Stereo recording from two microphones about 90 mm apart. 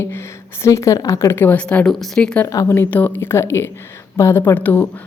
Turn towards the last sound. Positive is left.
turn(degrees=20)  # may be behind; listen again after turning